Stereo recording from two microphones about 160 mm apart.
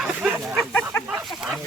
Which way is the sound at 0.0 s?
5° right (ahead or behind).